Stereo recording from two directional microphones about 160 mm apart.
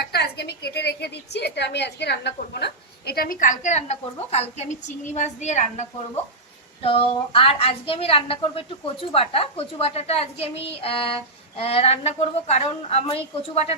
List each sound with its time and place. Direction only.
0.0 s a woman's voice: 90° left; by 5.9 s 45° left (ahead or behind)
6.8 s a woman's voice: 35° left (ahead or behind)